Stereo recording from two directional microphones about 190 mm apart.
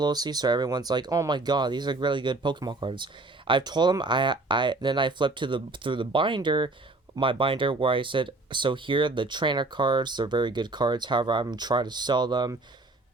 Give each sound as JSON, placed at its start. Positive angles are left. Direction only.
{"t": 0.0, "sound": "speech", "side_deg": -20}